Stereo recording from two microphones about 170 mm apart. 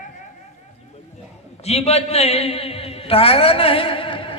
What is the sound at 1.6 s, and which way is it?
A man's voice, 40° left (ahead or behind).